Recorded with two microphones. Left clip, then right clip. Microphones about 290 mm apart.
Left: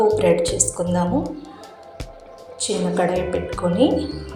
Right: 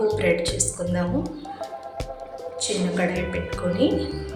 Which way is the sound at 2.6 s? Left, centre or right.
Centre.